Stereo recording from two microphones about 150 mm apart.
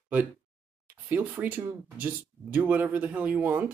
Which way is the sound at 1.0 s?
10° right (ahead or behind).